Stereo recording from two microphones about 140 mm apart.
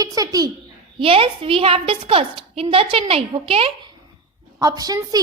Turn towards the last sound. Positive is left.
turn(degrees=-25)  # may be behind; listen again after turning